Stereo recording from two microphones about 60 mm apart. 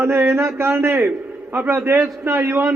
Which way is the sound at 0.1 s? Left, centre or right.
Right.